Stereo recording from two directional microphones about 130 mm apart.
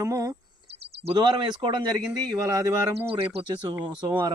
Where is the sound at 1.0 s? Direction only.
35° right (ahead or behind).